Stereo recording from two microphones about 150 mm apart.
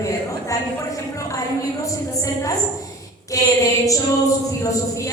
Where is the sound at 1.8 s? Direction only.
20° left (ahead or behind).